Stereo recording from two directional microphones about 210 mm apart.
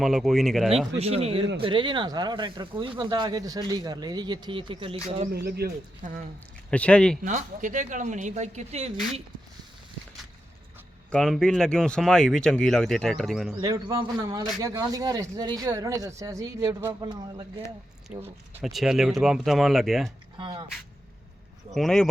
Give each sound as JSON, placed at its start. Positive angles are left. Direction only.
{"t": 0.0, "sound": "speech", "side_deg": 0}
{"t": 0.9, "sound": "speech", "side_deg": -30}
{"t": 5.5, "sound": "speech", "side_deg": -50}
{"t": 6.7, "sound": "speech", "side_deg": 5}
{"t": 7.2, "sound": "speech", "side_deg": -35}
{"t": 11.1, "sound": "speech", "side_deg": 0}
{"t": 13.6, "sound": "speech", "side_deg": -15}
{"t": 18.1, "sound": "speech", "side_deg": -5}
{"t": 20.4, "sound": "speech", "side_deg": -20}
{"t": 21.8, "sound": "speech", "side_deg": 5}